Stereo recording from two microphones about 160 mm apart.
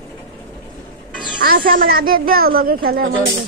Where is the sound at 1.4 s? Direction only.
65° right (ahead or behind).